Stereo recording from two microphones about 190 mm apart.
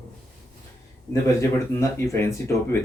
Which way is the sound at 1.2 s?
15° left (ahead or behind).